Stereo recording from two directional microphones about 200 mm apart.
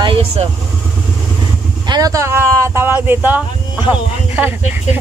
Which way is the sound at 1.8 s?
20° right (ahead or behind).